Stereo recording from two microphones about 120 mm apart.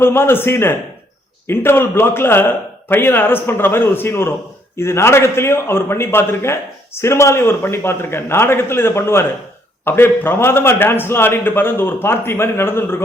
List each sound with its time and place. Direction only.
0.0 s a man's voice: 20° left (ahead or behind)